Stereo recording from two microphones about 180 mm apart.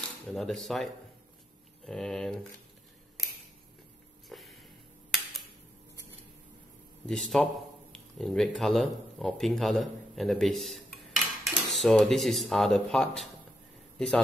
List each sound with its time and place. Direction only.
0.3 s speech: centre (ahead or behind)
1.9 s speech: centre (ahead or behind)
4.3 s a sound: centre (ahead or behind)
7.1 s a man's voice: centre (ahead or behind)